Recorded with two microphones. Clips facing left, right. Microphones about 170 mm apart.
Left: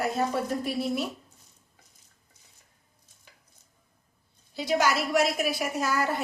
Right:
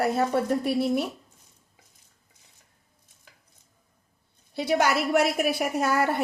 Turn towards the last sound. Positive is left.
turn(degrees=-60)  # may be behind; listen again after turning